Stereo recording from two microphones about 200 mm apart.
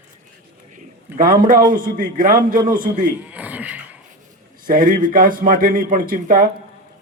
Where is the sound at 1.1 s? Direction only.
45° right (ahead or behind).